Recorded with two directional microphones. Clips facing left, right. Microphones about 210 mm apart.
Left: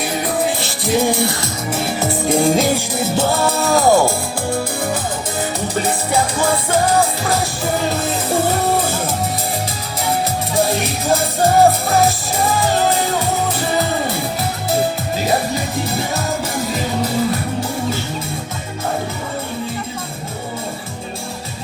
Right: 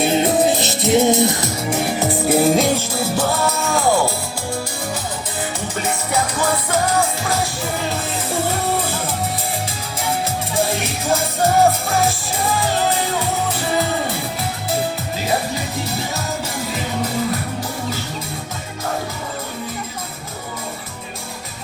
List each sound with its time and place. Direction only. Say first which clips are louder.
0.0 s music: right 4 dB; 25° right (ahead or behind); by 2.7 s centre (ahead or behind)
2.7 s music: left 2 dB; 20° left (ahead or behind); by 4.9 s 55° left (ahead or behind)
5.4 s music: left 4 dB; 35° left (ahead or behind)
10.1 s music: left 3 dB; 40° left (ahead or behind)
15.2 s music: left 3 dB; 40° left (ahead or behind)